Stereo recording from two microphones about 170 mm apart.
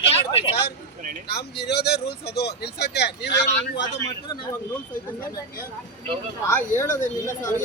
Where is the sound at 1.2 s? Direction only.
70° left (ahead or behind).